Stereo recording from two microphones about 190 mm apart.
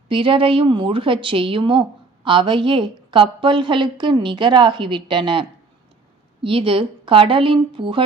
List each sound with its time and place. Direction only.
0.1 s a woman's voice: 25° right (ahead or behind)